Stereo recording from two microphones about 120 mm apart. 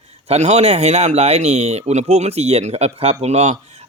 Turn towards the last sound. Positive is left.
turn(degrees=-65)  # may be behind; listen again after turning